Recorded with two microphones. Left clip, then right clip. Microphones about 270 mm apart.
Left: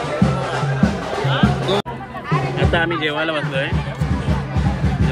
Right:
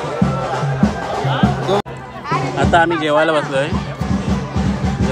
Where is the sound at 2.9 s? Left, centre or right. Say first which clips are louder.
Right 6 dB; centre.